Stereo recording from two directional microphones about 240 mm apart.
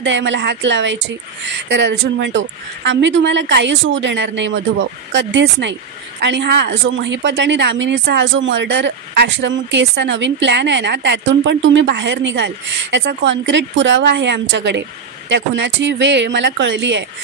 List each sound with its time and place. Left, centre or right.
0.0 s speech: right